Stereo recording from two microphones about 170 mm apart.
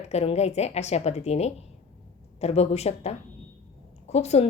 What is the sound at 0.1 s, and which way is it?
A woman's voice, 40° left (ahead or behind).